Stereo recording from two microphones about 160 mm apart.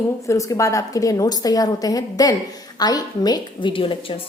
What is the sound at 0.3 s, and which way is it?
A woman's voice, 20° left (ahead or behind).